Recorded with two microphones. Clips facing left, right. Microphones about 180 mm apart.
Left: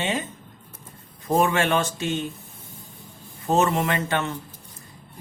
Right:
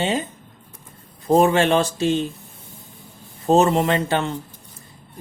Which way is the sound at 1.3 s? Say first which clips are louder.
Right 5 dB; 30° right (ahead or behind).